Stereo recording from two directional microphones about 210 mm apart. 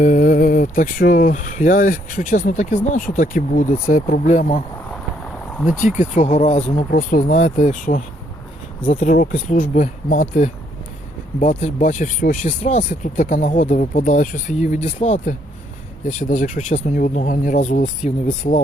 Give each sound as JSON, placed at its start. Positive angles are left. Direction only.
{"t": 0.0, "sound": "speech", "side_deg": 40}
{"t": 6.0, "sound": "speech", "side_deg": 35}